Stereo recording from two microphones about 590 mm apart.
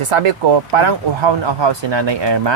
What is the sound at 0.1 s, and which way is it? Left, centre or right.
Speech, right.